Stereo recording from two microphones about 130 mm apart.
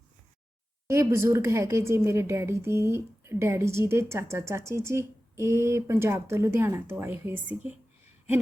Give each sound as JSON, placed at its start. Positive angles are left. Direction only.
{"t": 0.9, "sound": "a woman's voice", "side_deg": -20}